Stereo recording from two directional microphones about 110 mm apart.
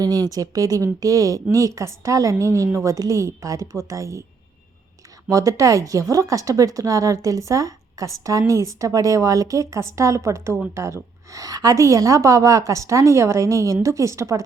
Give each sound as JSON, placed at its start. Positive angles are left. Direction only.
{"t": 0.0, "sound": "speech", "side_deg": -35}
{"t": 5.3, "sound": "speech", "side_deg": -30}